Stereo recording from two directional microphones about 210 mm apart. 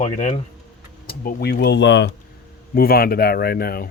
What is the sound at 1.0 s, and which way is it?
A man's voice, 45° left (ahead or behind).